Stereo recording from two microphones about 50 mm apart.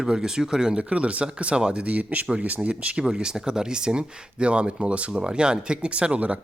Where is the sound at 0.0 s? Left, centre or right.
Centre.